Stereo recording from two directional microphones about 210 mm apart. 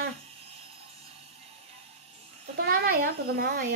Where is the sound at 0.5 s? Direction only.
30° right (ahead or behind).